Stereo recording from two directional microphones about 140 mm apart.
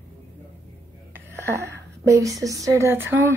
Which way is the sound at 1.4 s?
20° right (ahead or behind).